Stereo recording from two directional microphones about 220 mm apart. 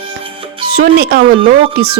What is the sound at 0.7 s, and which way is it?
Speech, 45° right (ahead or behind).